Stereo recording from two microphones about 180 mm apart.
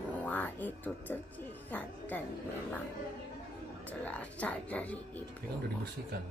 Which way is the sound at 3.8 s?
10° left (ahead or behind).